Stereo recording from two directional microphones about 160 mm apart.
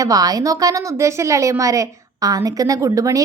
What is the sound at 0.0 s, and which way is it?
A woman's voice, 20° right (ahead or behind).